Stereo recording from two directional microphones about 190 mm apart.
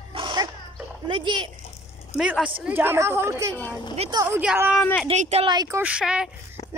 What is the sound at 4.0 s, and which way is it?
Speech, 25° right (ahead or behind).